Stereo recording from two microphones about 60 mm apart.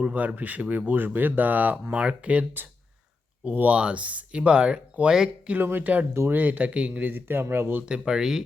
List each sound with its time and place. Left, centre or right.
0.0 s speech: right
5.5 s speech: right
7.9 s speech: centre